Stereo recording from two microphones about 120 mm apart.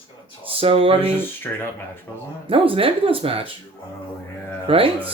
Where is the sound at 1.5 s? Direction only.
10° left (ahead or behind).